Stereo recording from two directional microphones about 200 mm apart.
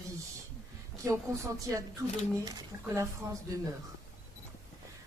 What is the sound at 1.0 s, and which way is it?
A woman's voice, 15° right (ahead or behind).